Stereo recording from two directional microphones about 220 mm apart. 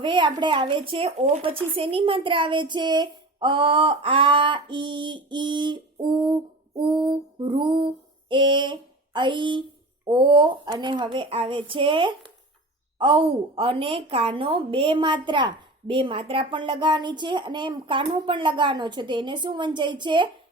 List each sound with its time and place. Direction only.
0.0 s speech: 20° right (ahead or behind)